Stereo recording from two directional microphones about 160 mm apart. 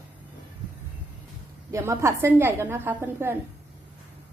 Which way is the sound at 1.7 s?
20° right (ahead or behind).